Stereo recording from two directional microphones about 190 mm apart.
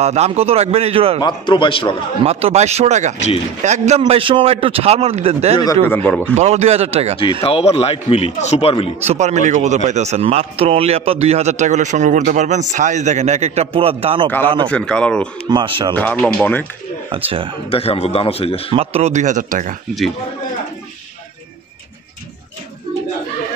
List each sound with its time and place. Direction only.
0.0 s speech: 35° right (ahead or behind)
1.2 s a man's voice: 25° left (ahead or behind)
2.2 s speech: 35° right (ahead or behind)
4.0 s speech: 25° right (ahead or behind)
6.0 s speech: 10° left (ahead or behind)
6.3 s speech: 35° right (ahead or behind)
7.4 s speech: 30° left (ahead or behind)
9.0 s speech: 35° right (ahead or behind)
14.7 s speech: 5° left (ahead or behind)
15.5 s speech: 25° right (ahead or behind)
15.9 s speech: 10° left (ahead or behind)
17.1 s speech: 25° right (ahead or behind)
17.6 s speech: 30° left (ahead or behind)
18.7 s speech: 30° right (ahead or behind)